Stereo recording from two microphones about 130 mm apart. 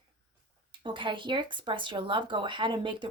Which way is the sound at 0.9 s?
40° right (ahead or behind).